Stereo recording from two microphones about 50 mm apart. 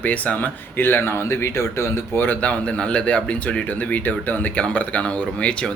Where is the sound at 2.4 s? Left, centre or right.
Left.